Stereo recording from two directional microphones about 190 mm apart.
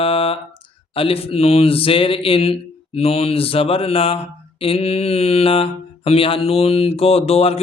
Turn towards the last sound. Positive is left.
turn(degrees=30)  # may be behind; listen again after turning